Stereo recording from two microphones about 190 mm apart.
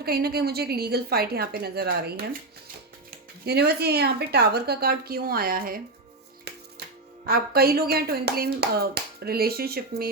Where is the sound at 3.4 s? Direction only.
55° right (ahead or behind).